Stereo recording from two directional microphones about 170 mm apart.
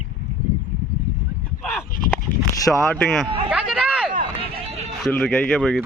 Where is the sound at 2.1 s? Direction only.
15° left (ahead or behind).